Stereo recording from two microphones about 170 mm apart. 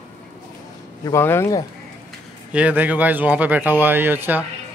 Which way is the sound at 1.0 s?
15° left (ahead or behind).